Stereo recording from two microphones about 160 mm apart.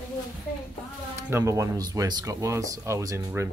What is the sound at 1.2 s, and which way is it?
Speech, 15° right (ahead or behind).